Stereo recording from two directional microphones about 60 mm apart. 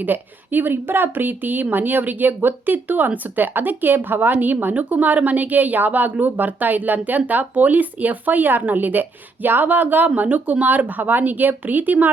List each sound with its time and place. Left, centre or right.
0.0 s a woman's voice: right